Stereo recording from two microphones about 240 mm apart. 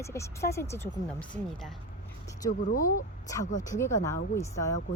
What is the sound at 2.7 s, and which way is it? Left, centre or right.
Speech, left.